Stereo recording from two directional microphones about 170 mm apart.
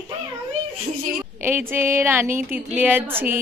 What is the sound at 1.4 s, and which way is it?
A woman's voice, 10° right (ahead or behind).